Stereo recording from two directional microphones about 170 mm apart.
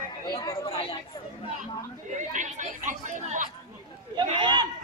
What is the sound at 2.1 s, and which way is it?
Chatter, 45° right (ahead or behind).